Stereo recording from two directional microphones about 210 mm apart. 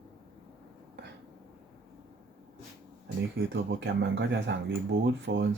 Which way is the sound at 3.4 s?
55° right (ahead or behind).